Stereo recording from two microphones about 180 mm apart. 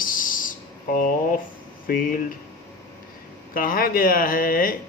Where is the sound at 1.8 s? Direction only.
50° left (ahead or behind).